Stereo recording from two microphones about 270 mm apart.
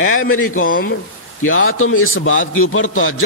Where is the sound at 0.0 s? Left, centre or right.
Left.